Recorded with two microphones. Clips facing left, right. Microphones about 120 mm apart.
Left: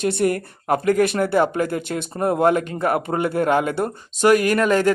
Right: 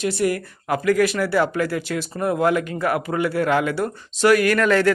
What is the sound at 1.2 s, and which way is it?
Speech, 20° left (ahead or behind).